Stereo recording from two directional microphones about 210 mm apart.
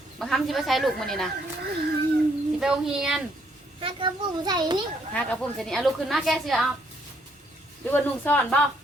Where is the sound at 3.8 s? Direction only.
25° right (ahead or behind).